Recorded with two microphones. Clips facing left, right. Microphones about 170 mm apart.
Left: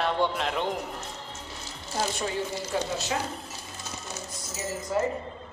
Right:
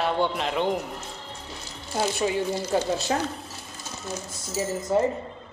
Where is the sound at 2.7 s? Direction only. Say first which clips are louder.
Right 5 dB; 30° right (ahead or behind).